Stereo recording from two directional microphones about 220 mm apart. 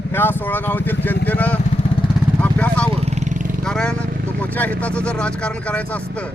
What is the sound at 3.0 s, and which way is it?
Vehicle, 30° right (ahead or behind).